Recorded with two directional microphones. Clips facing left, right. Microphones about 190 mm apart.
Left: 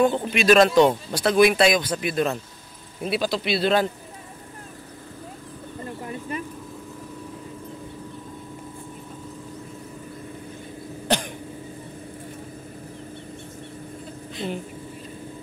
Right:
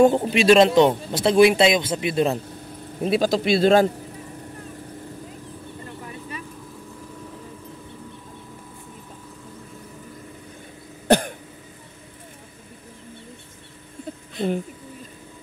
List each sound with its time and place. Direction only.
0.0 s speech: 40° right (ahead or behind)
3.0 s speech: 45° right (ahead or behind)
14.3 s a sound: 55° right (ahead or behind)